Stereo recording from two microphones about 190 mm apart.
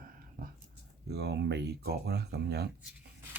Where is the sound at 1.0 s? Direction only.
60° right (ahead or behind).